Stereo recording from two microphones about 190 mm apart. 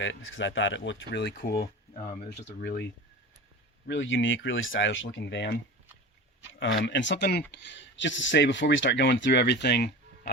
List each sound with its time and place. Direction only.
0.0 s speech: 80° left
1.4 s speech: 55° left (ahead or behind)
3.8 s speech: 75° left (ahead or behind)
6.5 s speech: 80° left; by 9.9 s 60° left (ahead or behind)